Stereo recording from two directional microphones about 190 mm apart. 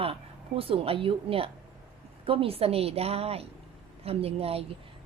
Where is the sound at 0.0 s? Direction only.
30° right (ahead or behind).